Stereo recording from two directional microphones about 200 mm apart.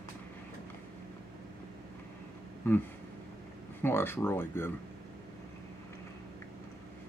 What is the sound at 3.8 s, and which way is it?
Speech, 10° left (ahead or behind).